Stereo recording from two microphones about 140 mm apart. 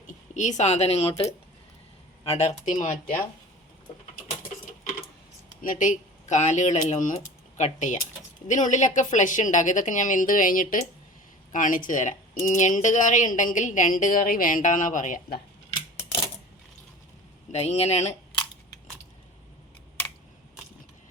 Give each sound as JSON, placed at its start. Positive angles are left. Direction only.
{"t": 0.1, "sound": "speech", "side_deg": 60}
{"t": 2.2, "sound": "speech", "side_deg": 45}
{"t": 4.6, "sound": "typewriter", "side_deg": 55}
{"t": 5.6, "sound": "speech", "side_deg": 65}
{"t": 17.5, "sound": "speech", "side_deg": 50}